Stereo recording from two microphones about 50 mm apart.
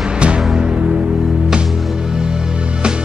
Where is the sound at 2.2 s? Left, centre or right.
Centre.